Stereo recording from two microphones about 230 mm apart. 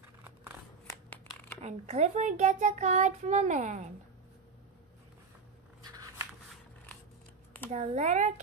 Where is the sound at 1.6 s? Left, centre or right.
Right.